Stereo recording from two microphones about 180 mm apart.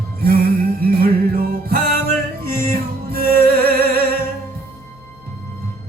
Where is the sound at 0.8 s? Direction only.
55° right (ahead or behind).